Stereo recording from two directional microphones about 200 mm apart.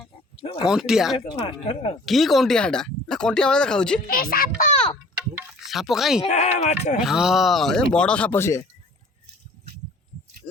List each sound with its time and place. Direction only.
0.6 s speech: 5° right (ahead or behind)
1.1 s speech: 25° left (ahead or behind)
2.0 s speech: centre (ahead or behind)
4.0 s speech: 45° left (ahead or behind)
5.4 s a sound: centre (ahead or behind)
6.2 s speech: 35° left (ahead or behind)
7.0 s speech: centre (ahead or behind); by 8.6 s 15° left (ahead or behind)
10.4 s heart sounds: 25° left (ahead or behind)